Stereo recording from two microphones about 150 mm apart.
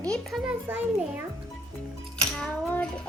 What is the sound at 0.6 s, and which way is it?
Speech, 10° right (ahead or behind).